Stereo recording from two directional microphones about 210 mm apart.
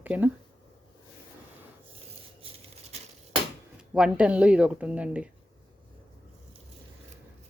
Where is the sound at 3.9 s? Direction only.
5° right (ahead or behind).